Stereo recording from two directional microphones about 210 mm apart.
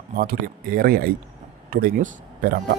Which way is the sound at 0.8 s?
45° right (ahead or behind).